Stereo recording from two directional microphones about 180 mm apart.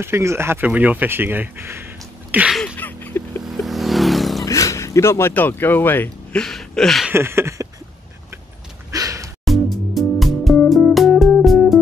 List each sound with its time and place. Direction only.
0.0 s speech: 15° right (ahead or behind)
2.3 s sneeze: 5° right (ahead or behind)
2.6 s a sound: 10° left (ahead or behind)
3.4 s vehicle: centre (ahead or behind)
4.5 s speech: 15° left (ahead or behind); by 7.1 s centre (ahead or behind)
7.1 s speech: 15° right (ahead or behind)
8.9 s gasp: 20° right (ahead or behind)
9.4 s music: centre (ahead or behind)